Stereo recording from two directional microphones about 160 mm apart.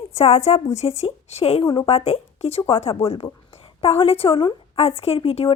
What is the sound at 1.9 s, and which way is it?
Speech, 40° left (ahead or behind).